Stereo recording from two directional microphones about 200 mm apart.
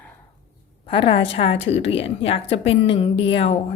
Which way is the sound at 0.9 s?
25° left (ahead or behind).